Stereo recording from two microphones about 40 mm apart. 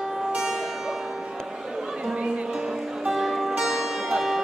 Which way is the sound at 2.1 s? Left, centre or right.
Right.